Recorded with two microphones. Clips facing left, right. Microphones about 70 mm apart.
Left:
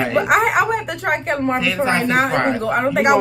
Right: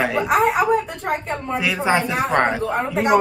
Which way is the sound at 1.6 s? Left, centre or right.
Centre.